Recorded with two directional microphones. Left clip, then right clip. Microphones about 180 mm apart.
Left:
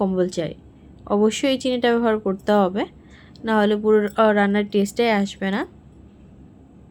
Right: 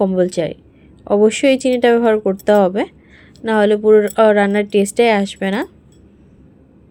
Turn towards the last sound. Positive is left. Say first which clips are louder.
# right 5 dB
turn(degrees=-30)  # may be behind; listen again after turning